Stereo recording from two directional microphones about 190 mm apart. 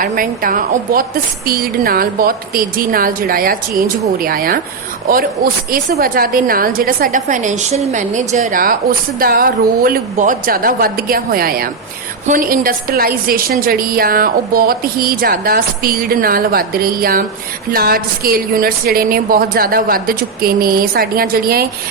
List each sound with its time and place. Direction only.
0.0 s a woman's voice: 45° right (ahead or behind)
5.7 s a woman's voice: 45° right (ahead or behind)